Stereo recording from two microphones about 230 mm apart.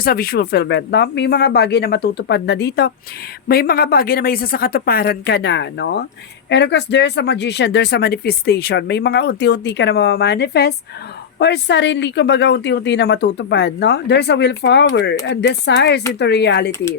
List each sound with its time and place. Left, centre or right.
0.0 s speech: left